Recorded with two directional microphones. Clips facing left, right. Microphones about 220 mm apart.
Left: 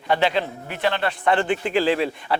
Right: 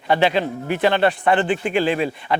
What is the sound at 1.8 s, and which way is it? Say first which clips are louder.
Speech: even; 90° left.